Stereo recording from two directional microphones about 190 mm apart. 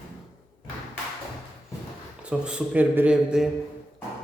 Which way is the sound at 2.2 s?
5° right (ahead or behind).